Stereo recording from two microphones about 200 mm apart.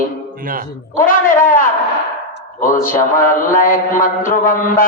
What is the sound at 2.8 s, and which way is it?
A man's voice, 45° left (ahead or behind).